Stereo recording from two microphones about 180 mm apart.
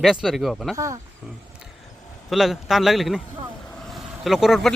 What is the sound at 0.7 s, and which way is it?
Speech, 20° right (ahead or behind).